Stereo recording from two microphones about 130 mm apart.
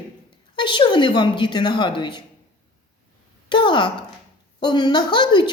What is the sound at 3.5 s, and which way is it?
A woman's voice, 40° left (ahead or behind).